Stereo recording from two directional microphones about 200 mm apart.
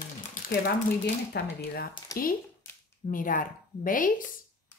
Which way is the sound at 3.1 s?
45° left (ahead or behind).